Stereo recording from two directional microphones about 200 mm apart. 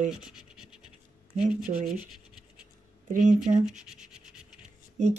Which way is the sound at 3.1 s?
35° right (ahead or behind).